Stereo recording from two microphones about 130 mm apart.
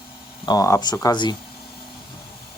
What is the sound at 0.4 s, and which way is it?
Speech, 25° left (ahead or behind).